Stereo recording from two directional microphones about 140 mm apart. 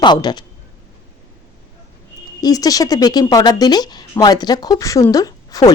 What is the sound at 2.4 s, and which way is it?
A woman's voice, 25° left (ahead or behind).